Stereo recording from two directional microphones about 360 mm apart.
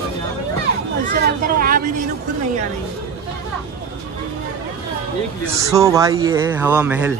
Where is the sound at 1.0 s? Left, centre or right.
Right.